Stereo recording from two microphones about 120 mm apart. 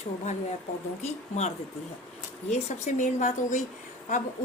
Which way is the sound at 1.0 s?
70° left (ahead or behind).